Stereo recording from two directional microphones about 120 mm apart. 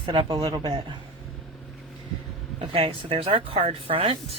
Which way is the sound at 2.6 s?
50° right (ahead or behind).